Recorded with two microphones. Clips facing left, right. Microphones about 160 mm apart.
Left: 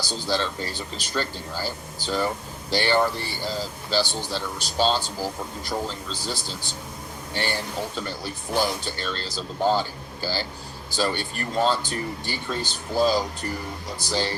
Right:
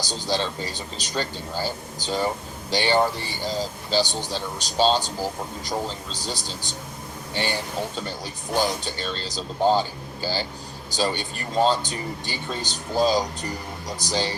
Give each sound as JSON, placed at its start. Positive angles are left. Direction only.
{"t": 0.0, "sound": "speech", "side_deg": -15}
{"t": 6.1, "sound": "speech", "side_deg": -15}